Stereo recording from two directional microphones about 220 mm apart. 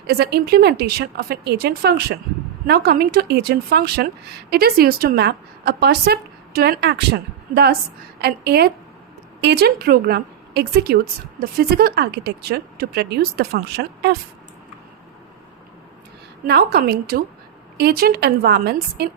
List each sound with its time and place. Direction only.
0.1 s a woman's voice: 45° right (ahead or behind)
16.5 s a woman's voice: 45° right (ahead or behind)